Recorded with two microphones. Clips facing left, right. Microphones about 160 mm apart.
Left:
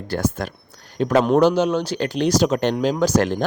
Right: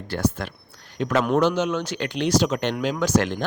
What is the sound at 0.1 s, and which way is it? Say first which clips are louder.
A man's voice: left 2 dB; 40° left (ahead or behind).